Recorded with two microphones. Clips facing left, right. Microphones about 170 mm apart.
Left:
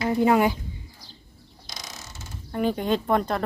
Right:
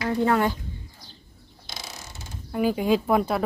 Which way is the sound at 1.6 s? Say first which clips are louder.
Right 1 dB; 5° right (ahead or behind).